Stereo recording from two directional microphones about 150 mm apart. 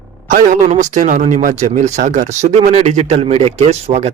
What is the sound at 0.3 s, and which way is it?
A man's voice, 60° right (ahead or behind).